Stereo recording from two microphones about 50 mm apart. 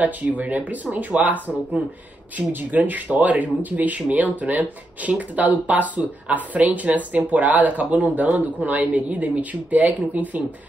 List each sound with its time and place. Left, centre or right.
0.0 s speech: right